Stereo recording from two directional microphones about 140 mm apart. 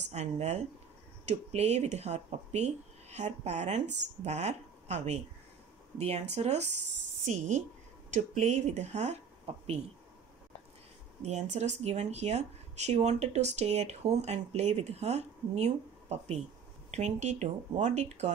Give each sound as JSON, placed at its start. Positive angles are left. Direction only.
{"t": 0.1, "sound": "speech", "side_deg": -55}
{"t": 11.2, "sound": "speech", "side_deg": -55}